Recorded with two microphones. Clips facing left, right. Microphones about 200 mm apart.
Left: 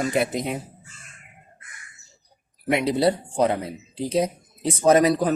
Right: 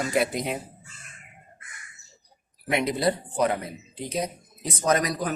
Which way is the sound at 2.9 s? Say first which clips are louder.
Left 4 dB; 30° left (ahead or behind).